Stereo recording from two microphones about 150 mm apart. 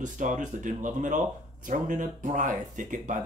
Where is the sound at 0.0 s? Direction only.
55° right (ahead or behind).